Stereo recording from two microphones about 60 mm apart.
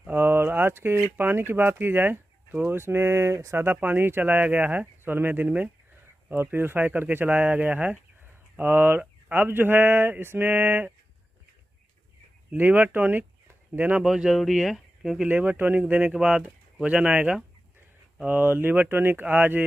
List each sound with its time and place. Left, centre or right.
0.1 s speech: right
8.5 s speech: right
12.5 s speech: right
14.0 s speech: centre
15.2 s speech: right
16.1 s speech: centre
18.2 s speech: right